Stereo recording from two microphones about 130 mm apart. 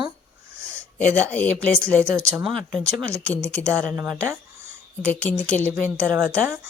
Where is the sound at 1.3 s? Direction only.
10° left (ahead or behind).